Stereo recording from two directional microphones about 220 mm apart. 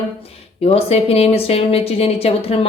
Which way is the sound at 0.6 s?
25° left (ahead or behind).